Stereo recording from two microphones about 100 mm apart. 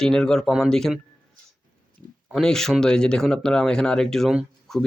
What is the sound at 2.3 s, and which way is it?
Speech, 5° left (ahead or behind).